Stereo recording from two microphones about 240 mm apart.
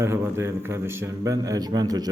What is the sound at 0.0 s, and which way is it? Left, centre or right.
Speech, centre.